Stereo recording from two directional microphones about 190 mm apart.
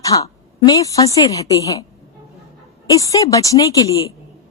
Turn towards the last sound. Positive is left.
turn(degrees=20)  # may be behind; listen again after turning